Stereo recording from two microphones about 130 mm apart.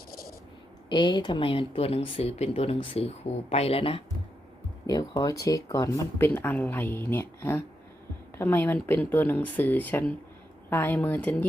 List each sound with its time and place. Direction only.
0.9 s speech: 35° left (ahead or behind)
4.9 s speech: 30° left (ahead or behind); by 11.4 s 15° left (ahead or behind)